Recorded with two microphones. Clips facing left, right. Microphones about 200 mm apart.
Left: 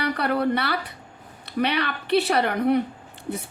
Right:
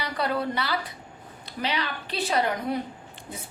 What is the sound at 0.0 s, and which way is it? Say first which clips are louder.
A woman's voice: left 5 dB; 60° left (ahead or behind).